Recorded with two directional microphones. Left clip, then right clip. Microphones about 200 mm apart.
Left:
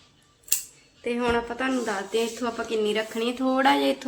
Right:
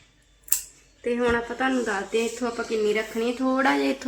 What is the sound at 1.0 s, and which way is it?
A woman's voice, 15° right (ahead or behind).